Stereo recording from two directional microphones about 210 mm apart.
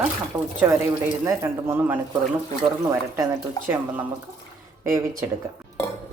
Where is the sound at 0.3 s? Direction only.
15° right (ahead or behind).